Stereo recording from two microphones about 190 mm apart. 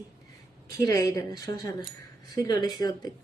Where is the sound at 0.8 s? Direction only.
20° left (ahead or behind).